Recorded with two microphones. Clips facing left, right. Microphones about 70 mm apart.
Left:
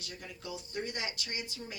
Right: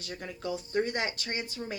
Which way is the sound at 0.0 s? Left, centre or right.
Right.